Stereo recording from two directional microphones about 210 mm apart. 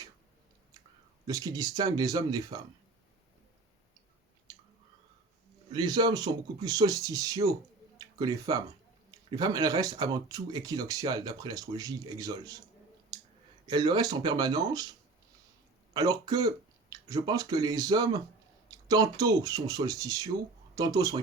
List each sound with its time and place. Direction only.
1.3 s speech: 15° right (ahead or behind)
4.5 s chewing: 20° right (ahead or behind)
5.7 s speech: 20° right (ahead or behind)
13.7 s speech: 20° right (ahead or behind)
15.9 s speech: 20° right (ahead or behind)